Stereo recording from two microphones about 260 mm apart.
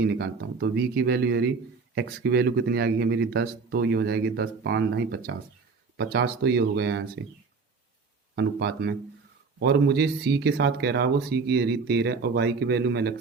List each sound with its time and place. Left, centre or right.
0.0 s speech: right
8.4 s speech: right